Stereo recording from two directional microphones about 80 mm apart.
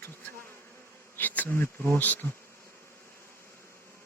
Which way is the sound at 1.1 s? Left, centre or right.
Left.